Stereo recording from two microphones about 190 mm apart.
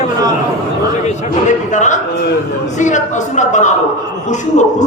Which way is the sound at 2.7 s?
40° left (ahead or behind).